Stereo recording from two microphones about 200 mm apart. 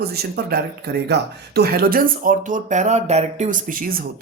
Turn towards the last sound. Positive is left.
turn(degrees=-45)  # may be behind; listen again after turning